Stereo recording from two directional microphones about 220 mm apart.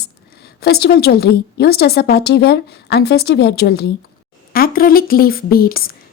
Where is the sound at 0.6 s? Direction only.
45° left (ahead or behind).